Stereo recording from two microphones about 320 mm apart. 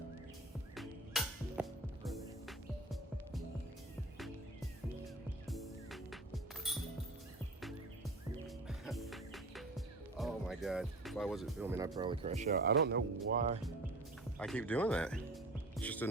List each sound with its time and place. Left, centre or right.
0.8 s music: centre
5.5 s music: centre
8.4 s music: centre; by 13.6 s right
14.3 s speech: centre
15.8 s throbbing: centre